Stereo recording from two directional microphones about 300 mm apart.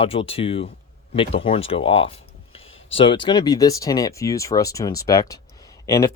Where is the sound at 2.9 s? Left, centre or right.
Centre.